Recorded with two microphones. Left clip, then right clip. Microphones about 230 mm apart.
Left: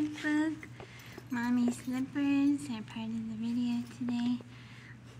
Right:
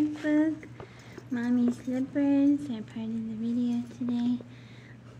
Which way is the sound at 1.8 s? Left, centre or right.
Left.